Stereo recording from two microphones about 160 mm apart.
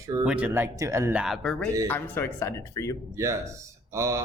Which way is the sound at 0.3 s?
10° right (ahead or behind).